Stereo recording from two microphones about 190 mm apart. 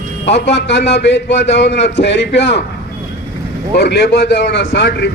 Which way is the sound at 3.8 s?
60° left (ahead or behind).